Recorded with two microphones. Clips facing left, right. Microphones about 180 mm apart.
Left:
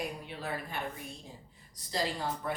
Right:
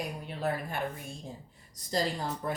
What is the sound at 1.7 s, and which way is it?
Speech, 40° right (ahead or behind).